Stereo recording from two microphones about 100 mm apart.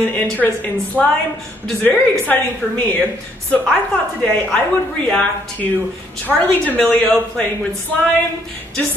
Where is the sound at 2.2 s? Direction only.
15° left (ahead or behind).